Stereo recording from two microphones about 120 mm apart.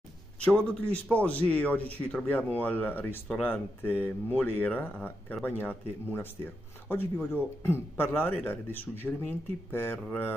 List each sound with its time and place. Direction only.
0.4 s a man's voice: 10° left (ahead or behind)